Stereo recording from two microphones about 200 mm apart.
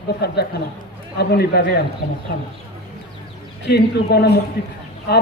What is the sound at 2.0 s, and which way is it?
Speech, 40° left (ahead or behind).